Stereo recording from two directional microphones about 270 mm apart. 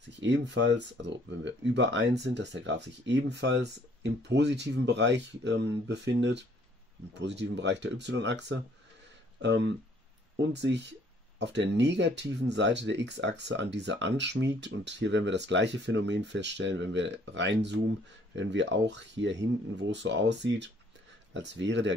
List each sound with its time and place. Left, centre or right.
0.2 s speech: right